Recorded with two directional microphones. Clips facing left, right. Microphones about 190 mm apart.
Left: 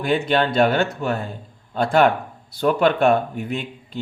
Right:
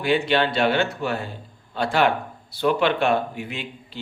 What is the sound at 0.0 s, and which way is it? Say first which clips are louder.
Speech: left 1 dB; 45° left (ahead or behind).